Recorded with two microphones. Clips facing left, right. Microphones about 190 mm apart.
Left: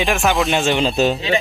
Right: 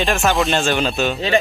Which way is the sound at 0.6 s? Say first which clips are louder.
Left 2 dB; 25° left (ahead or behind).